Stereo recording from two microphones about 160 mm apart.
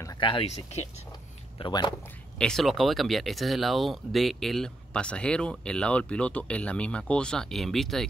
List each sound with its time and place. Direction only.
0.2 s speech: 30° left (ahead or behind)
2.3 s speech: 5° left (ahead or behind)